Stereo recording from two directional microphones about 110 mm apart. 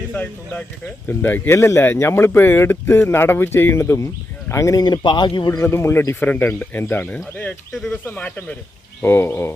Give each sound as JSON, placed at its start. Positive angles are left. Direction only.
{"t": 0.1, "sound": "speech", "side_deg": 15}
{"t": 5.5, "sound": "speech", "side_deg": 25}